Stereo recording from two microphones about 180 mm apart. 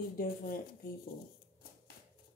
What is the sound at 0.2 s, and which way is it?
Speech, 50° left (ahead or behind).